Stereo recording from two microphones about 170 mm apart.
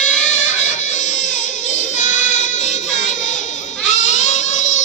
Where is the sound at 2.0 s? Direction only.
45° left (ahead or behind).